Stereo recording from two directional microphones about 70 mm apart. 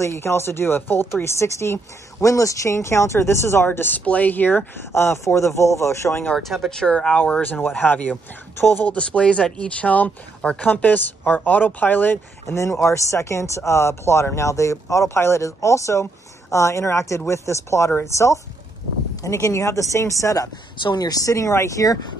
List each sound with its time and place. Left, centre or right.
0.0 s speech: left
3.6 s speech: left
6.3 s speech: centre; by 8.8 s left
8.8 s speech: centre
12.4 s speech: left
20.9 s speech: left